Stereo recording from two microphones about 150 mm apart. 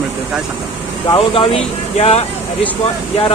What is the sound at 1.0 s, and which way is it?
Speech, 35° left (ahead or behind).